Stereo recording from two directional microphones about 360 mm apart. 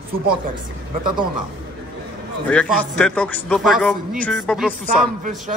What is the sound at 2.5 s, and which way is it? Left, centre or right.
A man's voice, centre.